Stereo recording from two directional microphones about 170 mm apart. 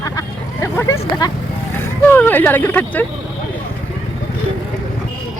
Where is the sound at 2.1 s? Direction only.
10° left (ahead or behind).